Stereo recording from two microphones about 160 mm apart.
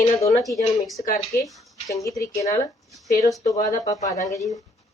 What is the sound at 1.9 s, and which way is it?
Speech, 20° left (ahead or behind).